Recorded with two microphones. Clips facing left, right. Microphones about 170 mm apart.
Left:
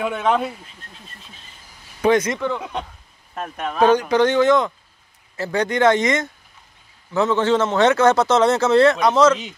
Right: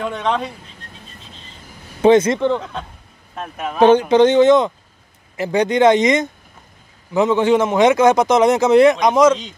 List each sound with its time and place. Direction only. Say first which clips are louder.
0.0 s speech: left 1 dB; 5° left (ahead or behind)
2.0 s speech: right 6 dB; 25° right (ahead or behind)
3.3 s speech: right 1 dB; centre (ahead or behind)
3.8 s a man's voice: right 5 dB; 25° right (ahead or behind)
9.3 s a man's voice: right 2 dB; 5° left (ahead or behind)